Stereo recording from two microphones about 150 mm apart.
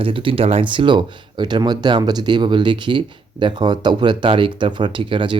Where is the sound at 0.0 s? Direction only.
35° right (ahead or behind).